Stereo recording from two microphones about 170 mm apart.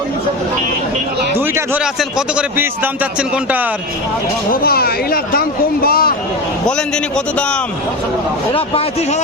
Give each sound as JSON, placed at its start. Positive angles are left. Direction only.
{"t": 1.4, "sound": "a sound", "side_deg": -10}
{"t": 2.0, "sound": "a man's voice", "side_deg": -5}
{"t": 4.5, "sound": "speech", "side_deg": 60}
{"t": 6.7, "sound": "a man's voice", "side_deg": 5}
{"t": 8.5, "sound": "a man's voice", "side_deg": 35}